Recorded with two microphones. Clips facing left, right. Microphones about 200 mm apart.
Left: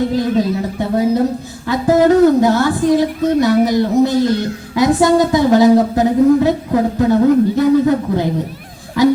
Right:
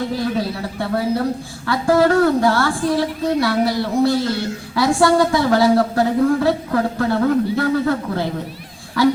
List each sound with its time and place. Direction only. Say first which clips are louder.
0.2 s a woman's voice: left 6 dB; 20° left (ahead or behind)